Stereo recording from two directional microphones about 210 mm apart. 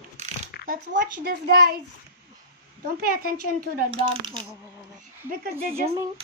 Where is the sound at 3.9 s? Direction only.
25° right (ahead or behind).